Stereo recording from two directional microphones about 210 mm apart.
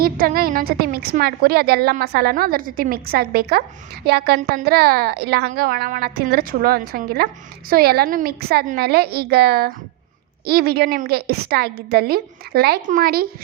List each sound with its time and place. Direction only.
0.0 s a woman's voice: 45° right (ahead or behind)